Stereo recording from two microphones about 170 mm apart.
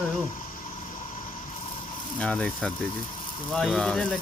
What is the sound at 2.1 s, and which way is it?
Speech, 5° left (ahead or behind).